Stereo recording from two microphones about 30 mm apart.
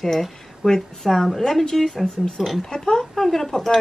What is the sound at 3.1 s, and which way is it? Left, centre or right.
Speech, centre.